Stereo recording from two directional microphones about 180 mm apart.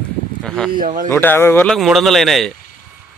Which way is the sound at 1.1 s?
10° left (ahead or behind).